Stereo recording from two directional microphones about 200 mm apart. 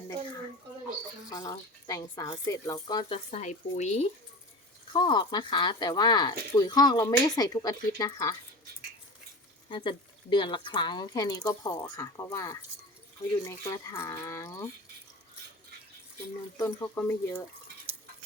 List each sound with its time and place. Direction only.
1.3 s speech: 15° left (ahead or behind)
3.3 s speech: 35° left (ahead or behind)
4.9 s speech: 20° left (ahead or behind)
9.6 s speech: 25° left (ahead or behind)
16.6 s speech: 15° left (ahead or behind)